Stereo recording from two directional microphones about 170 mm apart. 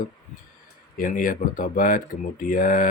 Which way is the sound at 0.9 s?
55° left (ahead or behind).